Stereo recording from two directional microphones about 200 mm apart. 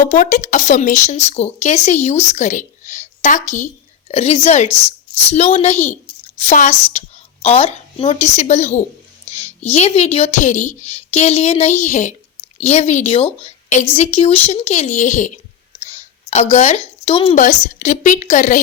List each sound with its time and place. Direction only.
0.0 s speech: 35° left (ahead or behind)
9.2 s a sound: 30° left (ahead or behind)
9.7 s a woman's voice: 35° left (ahead or behind)
13.4 s a sound: 35° left (ahead or behind)
13.9 s speech: 30° left (ahead or behind)
16.3 s a woman's voice: 30° left (ahead or behind)